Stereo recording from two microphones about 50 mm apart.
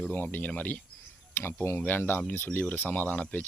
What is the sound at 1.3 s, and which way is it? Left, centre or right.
Speech, left.